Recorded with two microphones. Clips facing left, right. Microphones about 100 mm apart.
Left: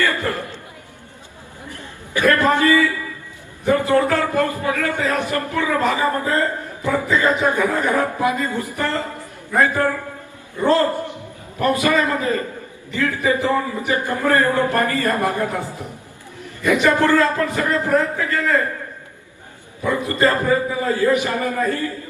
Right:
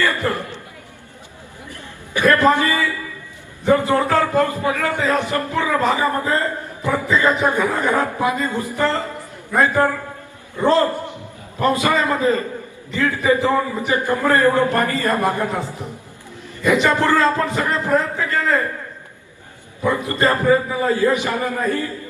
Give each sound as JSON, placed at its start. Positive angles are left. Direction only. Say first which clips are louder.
{"t": 0.0, "sound": "speech", "louder": "right 1 dB", "side_deg": -20}
{"t": 2.1, "sound": "a man's voice", "louder": "right 1 dB", "side_deg": -20}
{"t": 19.8, "sound": "a man's voice", "louder": "even", "side_deg": -20}